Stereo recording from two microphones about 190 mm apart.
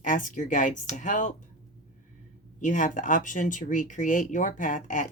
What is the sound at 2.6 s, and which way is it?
Speech, 40° left (ahead or behind).